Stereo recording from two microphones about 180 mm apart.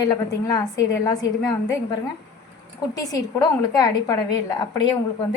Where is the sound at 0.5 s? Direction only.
20° left (ahead or behind).